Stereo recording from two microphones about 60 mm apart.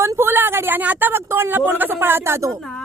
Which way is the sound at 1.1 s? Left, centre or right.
Right.